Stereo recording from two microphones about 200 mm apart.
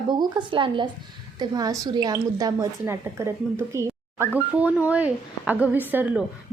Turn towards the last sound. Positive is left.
turn(degrees=-10)  # may be behind; listen again after turning